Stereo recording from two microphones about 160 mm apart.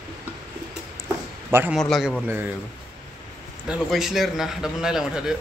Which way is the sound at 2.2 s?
15° right (ahead or behind).